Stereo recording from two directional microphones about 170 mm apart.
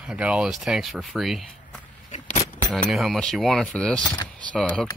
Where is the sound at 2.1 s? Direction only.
40° left (ahead or behind).